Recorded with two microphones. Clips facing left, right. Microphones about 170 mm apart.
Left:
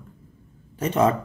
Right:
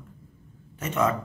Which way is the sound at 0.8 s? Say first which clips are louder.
Left 5 dB; 30° left (ahead or behind).